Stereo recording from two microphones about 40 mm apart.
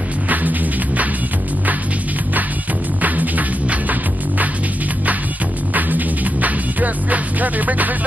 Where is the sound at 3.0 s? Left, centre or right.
Right.